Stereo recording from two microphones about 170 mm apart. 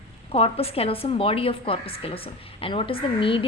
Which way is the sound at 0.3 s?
35° left (ahead or behind).